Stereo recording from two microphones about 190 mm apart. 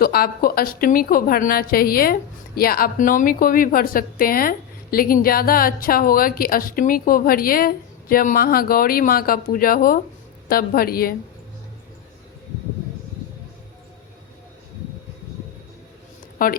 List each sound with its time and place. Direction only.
0.0 s a woman's voice: 50° left (ahead or behind)
16.4 s a woman's voice: 50° left (ahead or behind)